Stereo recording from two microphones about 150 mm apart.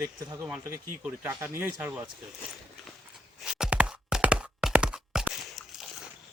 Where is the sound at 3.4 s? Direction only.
5° right (ahead or behind).